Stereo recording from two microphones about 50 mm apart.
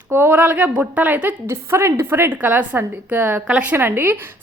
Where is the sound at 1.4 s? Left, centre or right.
Right.